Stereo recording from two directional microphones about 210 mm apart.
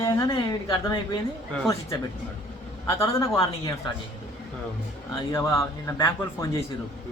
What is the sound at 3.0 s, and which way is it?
Speech, 15° left (ahead or behind).